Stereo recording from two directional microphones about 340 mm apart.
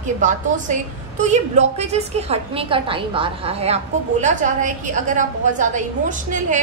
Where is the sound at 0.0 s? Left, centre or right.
Right.